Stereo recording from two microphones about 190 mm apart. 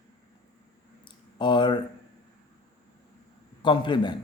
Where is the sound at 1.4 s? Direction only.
25° left (ahead or behind).